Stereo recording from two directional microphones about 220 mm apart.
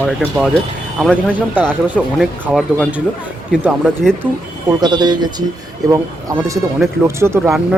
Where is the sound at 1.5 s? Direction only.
10° right (ahead or behind).